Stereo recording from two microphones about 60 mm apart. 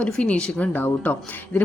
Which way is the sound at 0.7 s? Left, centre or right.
Left.